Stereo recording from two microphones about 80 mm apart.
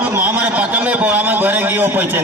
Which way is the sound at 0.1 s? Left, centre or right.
Right.